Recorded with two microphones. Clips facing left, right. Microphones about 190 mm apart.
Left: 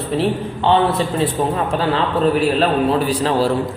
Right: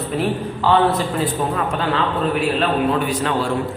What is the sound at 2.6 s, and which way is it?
Speech, 35° left (ahead or behind).